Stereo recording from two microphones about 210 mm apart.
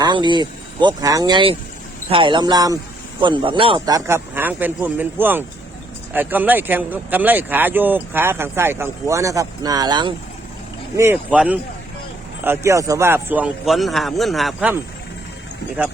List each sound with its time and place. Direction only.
0.0 s speech: 20° right (ahead or behind); by 14.8 s 5° right (ahead or behind)